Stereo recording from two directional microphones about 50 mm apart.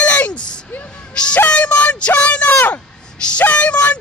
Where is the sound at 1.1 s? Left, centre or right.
Centre.